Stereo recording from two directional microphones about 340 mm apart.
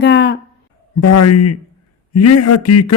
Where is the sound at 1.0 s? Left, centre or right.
Left.